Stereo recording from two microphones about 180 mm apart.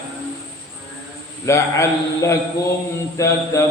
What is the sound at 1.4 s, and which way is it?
A man's voice, 15° left (ahead or behind).